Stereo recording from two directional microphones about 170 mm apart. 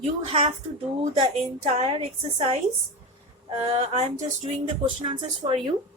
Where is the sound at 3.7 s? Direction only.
40° right (ahead or behind).